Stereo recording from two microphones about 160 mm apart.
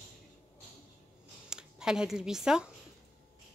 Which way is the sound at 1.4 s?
5° right (ahead or behind).